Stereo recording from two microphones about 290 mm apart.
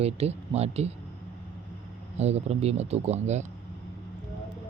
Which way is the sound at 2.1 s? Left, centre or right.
Right.